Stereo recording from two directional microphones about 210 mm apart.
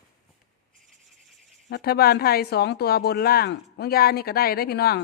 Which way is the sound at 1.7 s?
50° left (ahead or behind).